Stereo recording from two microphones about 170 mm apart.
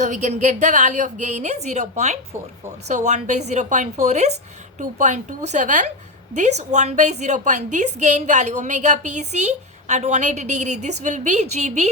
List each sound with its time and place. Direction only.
0.0 s a woman's voice: 45° right (ahead or behind)